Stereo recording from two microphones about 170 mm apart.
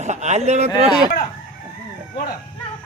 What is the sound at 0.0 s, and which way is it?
Speech, 45° right (ahead or behind).